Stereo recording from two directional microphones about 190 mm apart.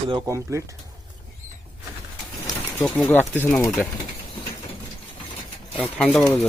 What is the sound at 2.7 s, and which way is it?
Speech, 10° left (ahead or behind).